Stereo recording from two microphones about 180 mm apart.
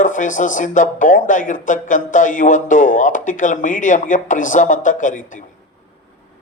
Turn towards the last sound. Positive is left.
turn(degrees=45)  # may be behind; listen again after turning